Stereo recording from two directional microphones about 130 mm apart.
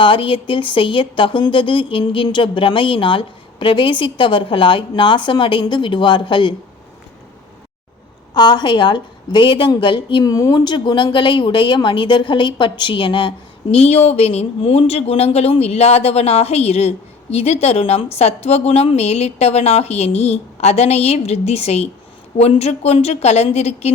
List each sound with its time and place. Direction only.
0.0 s a woman's voice: 40° left (ahead or behind)
8.3 s a woman's voice: 35° left (ahead or behind); by 23.9 s 50° left (ahead or behind)